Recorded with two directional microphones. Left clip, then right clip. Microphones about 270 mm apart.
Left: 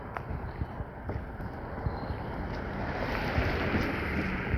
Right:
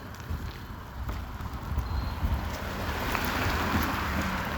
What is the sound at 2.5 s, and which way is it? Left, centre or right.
Vehicle, right.